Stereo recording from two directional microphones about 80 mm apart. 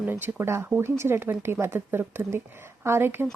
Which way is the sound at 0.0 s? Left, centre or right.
Right.